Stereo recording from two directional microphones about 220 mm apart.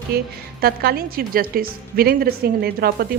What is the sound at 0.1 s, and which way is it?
A woman's voice, 45° right (ahead or behind).